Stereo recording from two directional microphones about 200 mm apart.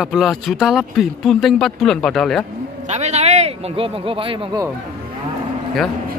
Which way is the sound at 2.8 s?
35° right (ahead or behind).